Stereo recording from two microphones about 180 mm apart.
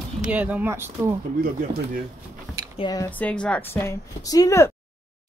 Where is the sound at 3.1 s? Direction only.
5° left (ahead or behind).